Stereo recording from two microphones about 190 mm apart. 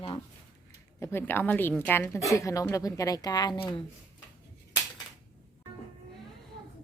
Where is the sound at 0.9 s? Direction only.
15° left (ahead or behind).